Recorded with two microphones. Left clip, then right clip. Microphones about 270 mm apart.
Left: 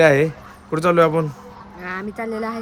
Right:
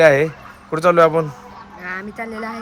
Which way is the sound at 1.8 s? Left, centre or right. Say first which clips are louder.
Left 1 dB; centre.